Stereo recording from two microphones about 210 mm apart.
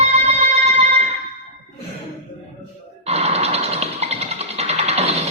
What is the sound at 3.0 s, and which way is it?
Music, 30° right (ahead or behind).